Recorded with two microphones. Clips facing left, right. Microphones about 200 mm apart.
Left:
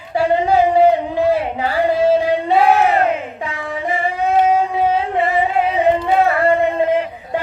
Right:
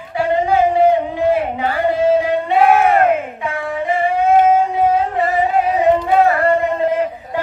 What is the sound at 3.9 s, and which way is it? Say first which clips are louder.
Singing: right 3 dB; 50° right (ahead or behind).